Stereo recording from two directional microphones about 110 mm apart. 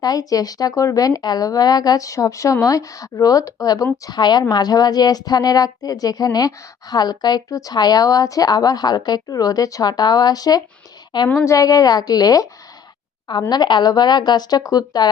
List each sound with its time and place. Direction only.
0.0 s a woman's voice: 35° left (ahead or behind)
13.5 s a woman's voice: 40° left (ahead or behind)